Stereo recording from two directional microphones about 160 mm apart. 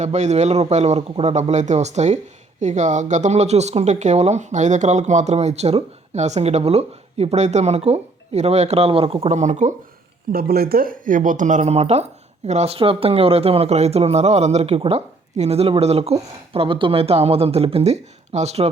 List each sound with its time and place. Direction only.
0.0 s speech: 45° right (ahead or behind)
10.3 s speech: 70° right (ahead or behind); by 18.7 s 40° right (ahead or behind)